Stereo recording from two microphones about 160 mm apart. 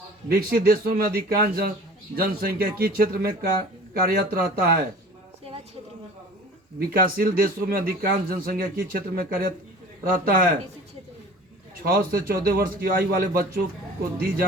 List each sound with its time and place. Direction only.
0.3 s speech: 70° right (ahead or behind)
6.7 s a man's voice: 65° right (ahead or behind)
11.8 s speech: 65° right (ahead or behind)